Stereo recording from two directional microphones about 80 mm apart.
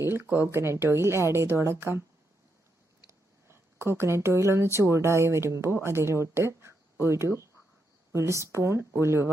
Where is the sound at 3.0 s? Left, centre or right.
Right.